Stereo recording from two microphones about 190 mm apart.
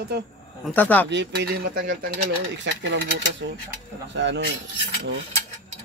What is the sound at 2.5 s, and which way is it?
Speech, 70° right (ahead or behind).